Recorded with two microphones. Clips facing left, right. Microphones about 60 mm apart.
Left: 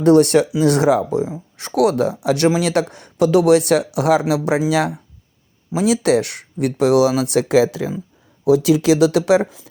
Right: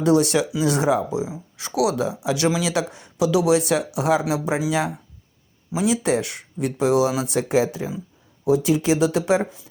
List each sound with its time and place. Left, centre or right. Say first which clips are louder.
0.0 s speech: left 6 dB; left